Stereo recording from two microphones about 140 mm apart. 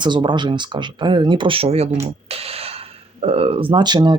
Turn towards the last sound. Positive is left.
turn(degrees=-30)  # may be behind; listen again after turning